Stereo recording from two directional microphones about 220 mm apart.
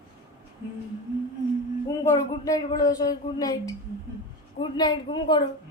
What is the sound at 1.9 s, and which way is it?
A woman's voice, 15° left (ahead or behind).